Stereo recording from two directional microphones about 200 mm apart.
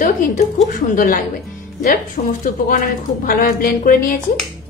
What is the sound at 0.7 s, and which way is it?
A woman's voice, 45° left (ahead or behind).